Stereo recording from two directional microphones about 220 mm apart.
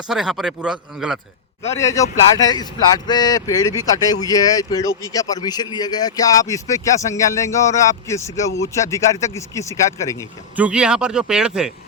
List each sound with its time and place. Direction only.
0.1 s speech: centre (ahead or behind)
1.6 s speech: 10° left (ahead or behind)
10.5 s speech: 5° right (ahead or behind)